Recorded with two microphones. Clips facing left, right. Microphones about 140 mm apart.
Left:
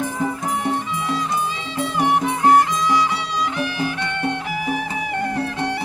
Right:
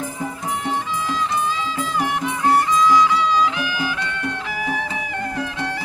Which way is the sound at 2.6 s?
65° left (ahead or behind).